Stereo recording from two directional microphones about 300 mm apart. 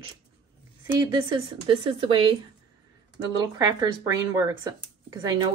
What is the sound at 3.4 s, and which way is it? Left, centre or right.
Speech, centre.